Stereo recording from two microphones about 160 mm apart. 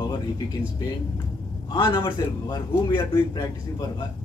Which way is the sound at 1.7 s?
30° left (ahead or behind).